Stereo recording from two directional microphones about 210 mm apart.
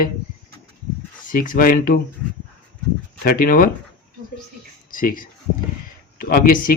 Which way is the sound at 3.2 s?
45° left (ahead or behind).